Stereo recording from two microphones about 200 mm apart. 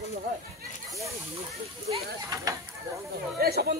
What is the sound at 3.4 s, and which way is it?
Speech, 50° right (ahead or behind).